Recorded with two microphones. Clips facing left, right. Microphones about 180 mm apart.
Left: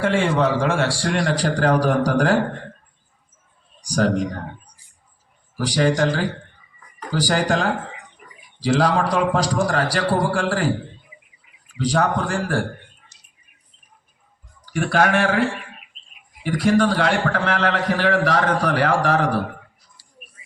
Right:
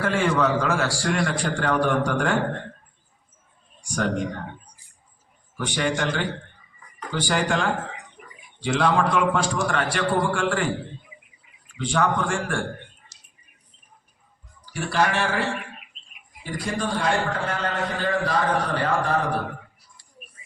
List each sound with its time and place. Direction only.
0.0 s a man's voice: 30° left (ahead or behind)
3.8 s a man's voice: 35° left (ahead or behind)
5.5 s a man's voice: 35° left (ahead or behind)
11.8 s a man's voice: 35° left (ahead or behind)
13.1 s a sound: 90° right
14.6 s speech: 55° left (ahead or behind)
16.4 s a man's voice: 80° left